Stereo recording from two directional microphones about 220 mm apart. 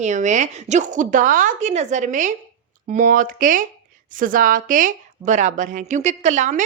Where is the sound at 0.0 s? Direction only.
35° right (ahead or behind).